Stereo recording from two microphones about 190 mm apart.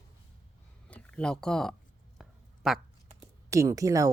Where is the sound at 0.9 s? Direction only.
5° left (ahead or behind).